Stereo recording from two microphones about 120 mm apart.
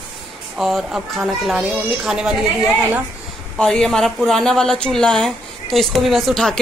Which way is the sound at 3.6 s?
5° left (ahead or behind).